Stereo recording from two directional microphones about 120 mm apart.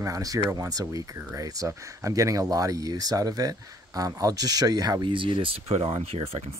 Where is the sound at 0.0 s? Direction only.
30° right (ahead or behind).